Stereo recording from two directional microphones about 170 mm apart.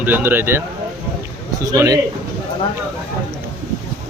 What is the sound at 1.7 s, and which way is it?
Speech, 20° right (ahead or behind).